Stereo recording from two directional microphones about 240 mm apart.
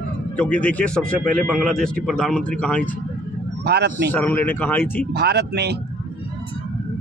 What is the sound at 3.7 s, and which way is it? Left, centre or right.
Speech, right.